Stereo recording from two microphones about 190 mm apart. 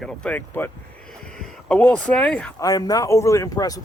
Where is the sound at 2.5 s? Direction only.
20° left (ahead or behind).